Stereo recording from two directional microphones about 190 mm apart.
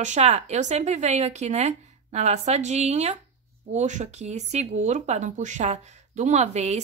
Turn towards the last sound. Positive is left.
turn(degrees=-35)  # may be behind; listen again after turning